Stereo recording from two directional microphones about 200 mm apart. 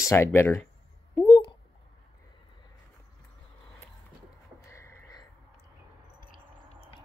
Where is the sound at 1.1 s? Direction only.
15° left (ahead or behind).